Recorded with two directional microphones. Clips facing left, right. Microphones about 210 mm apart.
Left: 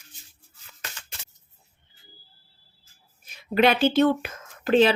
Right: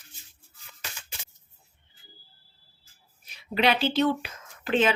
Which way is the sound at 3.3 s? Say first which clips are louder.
Left 4 dB; 50° left (ahead or behind).